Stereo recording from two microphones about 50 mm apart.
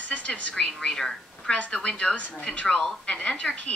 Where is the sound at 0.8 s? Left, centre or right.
Centre.